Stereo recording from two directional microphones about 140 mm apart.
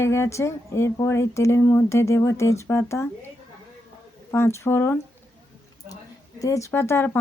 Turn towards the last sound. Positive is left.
turn(degrees=20)  # may be behind; listen again after turning